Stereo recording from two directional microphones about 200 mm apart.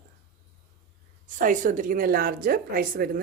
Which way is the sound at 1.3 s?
40° right (ahead or behind).